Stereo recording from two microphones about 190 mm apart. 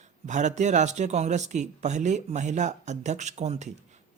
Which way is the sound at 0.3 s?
40° right (ahead or behind).